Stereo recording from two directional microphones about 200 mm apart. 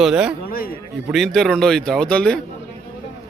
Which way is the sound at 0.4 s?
50° left (ahead or behind).